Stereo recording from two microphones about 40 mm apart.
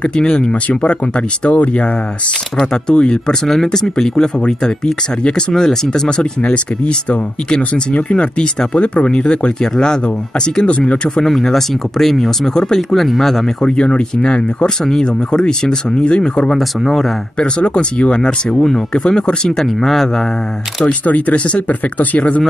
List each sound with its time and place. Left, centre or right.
0.3 s speech: left
1.5 s speech: left
3.0 s speech: left
3.6 s speech: centre
11.2 s speech: centre
13.7 s speech: left
16.4 s speech: centre
17.4 s speech: left
18.2 s speech: centre
18.9 s speech: left; by 20.2 s centre
20.8 s speech: left